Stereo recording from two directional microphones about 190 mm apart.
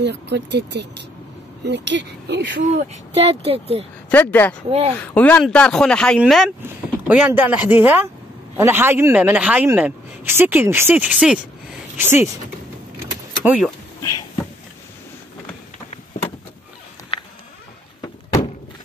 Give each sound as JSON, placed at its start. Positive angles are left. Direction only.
{"t": 0.0, "sound": "speech", "side_deg": -65}
{"t": 2.6, "sound": "speech", "side_deg": -35}
{"t": 4.1, "sound": "speech", "side_deg": 10}
{"t": 4.6, "sound": "speech", "side_deg": -30}
{"t": 4.9, "sound": "speech", "side_deg": 5}
{"t": 13.4, "sound": "speech", "side_deg": -5}
{"t": 18.0, "sound": "door", "side_deg": 20}